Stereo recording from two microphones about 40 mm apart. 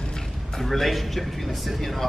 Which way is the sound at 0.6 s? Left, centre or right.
Centre.